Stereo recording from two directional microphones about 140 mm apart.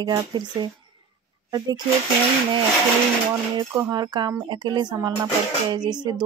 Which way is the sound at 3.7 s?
30° right (ahead or behind).